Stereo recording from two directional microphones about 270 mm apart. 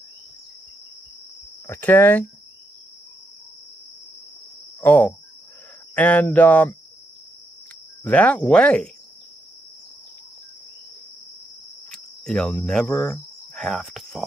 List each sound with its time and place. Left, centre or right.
1.7 s speech: centre
4.7 s speech: centre
8.0 s speech: centre
11.9 s cricket: centre